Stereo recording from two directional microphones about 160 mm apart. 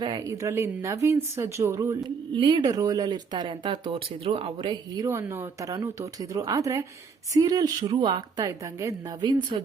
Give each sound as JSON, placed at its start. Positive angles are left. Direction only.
{"t": 0.0, "sound": "speech", "side_deg": -25}
{"t": 5.0, "sound": "speech", "side_deg": -15}